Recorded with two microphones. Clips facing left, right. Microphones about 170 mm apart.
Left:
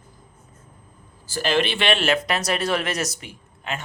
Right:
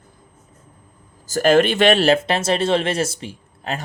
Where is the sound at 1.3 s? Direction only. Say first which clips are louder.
Right 8 dB; 45° right (ahead or behind).